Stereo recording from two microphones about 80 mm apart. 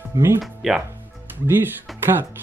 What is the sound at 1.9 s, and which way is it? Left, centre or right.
Music, centre.